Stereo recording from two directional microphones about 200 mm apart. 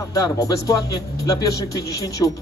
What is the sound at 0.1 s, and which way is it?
Speech, 15° left (ahead or behind).